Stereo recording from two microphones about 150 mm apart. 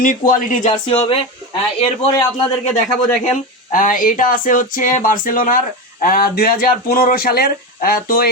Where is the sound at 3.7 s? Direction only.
60° left (ahead or behind).